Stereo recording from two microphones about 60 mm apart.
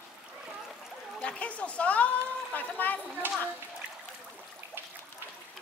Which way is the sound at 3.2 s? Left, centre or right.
Right.